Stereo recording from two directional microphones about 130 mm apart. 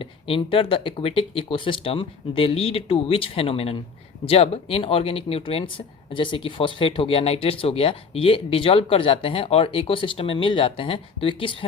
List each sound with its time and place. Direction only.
0.0 s speech: 45° left (ahead or behind)